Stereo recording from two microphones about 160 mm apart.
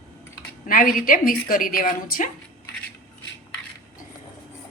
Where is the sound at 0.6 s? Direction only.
60° left (ahead or behind).